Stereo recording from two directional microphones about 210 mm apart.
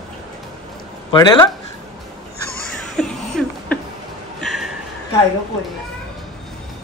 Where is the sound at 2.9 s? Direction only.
5° left (ahead or behind).